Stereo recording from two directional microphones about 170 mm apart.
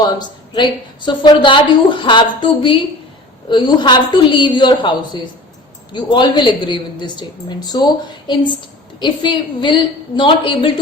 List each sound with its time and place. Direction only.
0.0 s a woman's voice: 25° left (ahead or behind)